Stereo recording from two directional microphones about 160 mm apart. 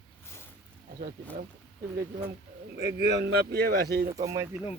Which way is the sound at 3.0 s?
90° right.